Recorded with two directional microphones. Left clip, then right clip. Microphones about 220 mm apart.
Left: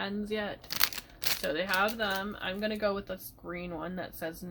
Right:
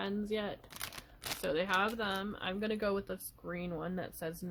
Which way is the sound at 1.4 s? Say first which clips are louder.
Left 2 dB; 40° right (ahead or behind).